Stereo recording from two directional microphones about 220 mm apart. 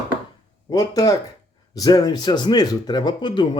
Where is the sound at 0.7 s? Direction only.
15° left (ahead or behind).